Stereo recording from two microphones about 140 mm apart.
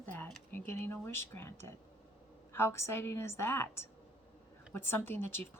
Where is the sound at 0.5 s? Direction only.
15° left (ahead or behind).